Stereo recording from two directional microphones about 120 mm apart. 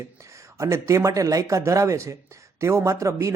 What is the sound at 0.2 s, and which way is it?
Speech, 25° right (ahead or behind).